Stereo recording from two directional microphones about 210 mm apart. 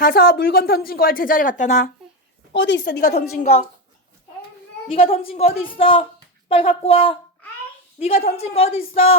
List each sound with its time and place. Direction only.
0.0 s a woman's voice: 45° left (ahead or behind)
2.5 s a woman's voice: 60° left (ahead or behind)
3.4 s speech: 30° left (ahead or behind)
4.9 s a woman's voice: 25° left (ahead or behind)